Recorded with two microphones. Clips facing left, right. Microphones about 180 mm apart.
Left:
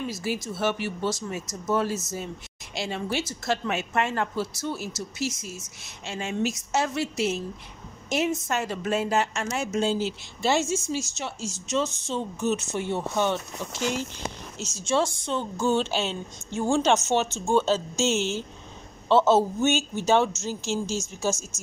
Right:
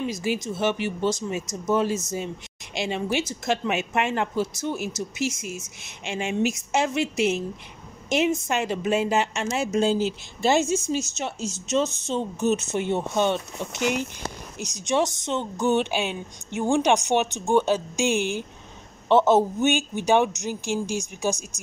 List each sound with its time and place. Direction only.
0.0 s a woman's voice: 15° right (ahead or behind)
8.5 s a woman's voice: 20° right (ahead or behind)
9.8 s a woman's voice: 15° right (ahead or behind)